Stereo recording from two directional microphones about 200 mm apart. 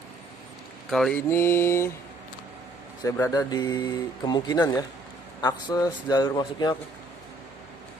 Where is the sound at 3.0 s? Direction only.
15° left (ahead or behind).